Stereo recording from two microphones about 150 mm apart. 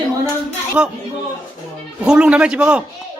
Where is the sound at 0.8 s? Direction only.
5° right (ahead or behind).